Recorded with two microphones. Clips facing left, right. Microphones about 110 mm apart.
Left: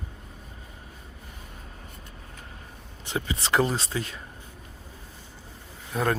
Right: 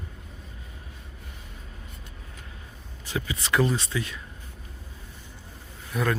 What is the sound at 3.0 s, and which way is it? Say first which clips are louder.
Speech: left 1 dB; 30° left (ahead or behind).